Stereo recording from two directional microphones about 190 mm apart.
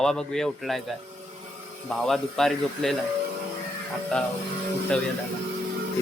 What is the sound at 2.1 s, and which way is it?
Speech, centre (ahead or behind).